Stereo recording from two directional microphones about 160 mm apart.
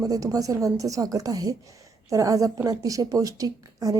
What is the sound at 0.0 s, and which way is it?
A woman's voice, 20° right (ahead or behind).